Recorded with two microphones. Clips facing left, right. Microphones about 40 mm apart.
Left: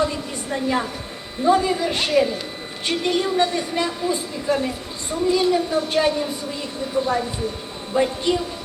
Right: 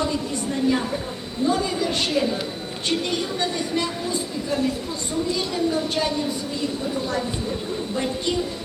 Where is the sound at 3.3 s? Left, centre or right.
Centre.